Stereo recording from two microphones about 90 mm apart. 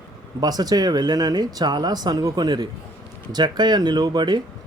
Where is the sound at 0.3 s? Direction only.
45° right (ahead or behind).